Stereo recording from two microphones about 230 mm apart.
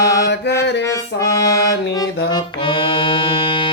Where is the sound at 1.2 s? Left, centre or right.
Centre.